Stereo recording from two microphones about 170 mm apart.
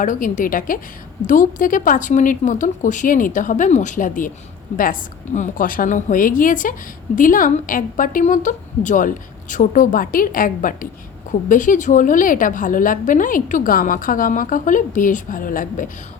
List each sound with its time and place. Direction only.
0.0 s a woman's voice: 50° left (ahead or behind)